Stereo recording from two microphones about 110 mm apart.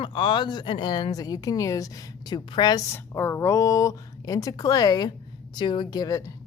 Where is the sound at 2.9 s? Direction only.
20° left (ahead or behind).